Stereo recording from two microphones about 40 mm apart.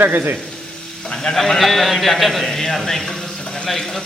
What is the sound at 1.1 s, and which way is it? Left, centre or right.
Speech, centre.